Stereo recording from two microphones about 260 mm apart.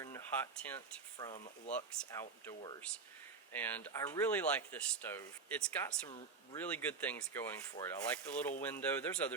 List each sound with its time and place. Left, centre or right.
0.0 s speech: centre
1.2 s speech: left
1.7 s speech: centre
3.5 s speech: centre